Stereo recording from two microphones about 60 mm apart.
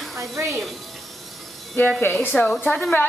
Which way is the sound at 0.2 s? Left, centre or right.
Right.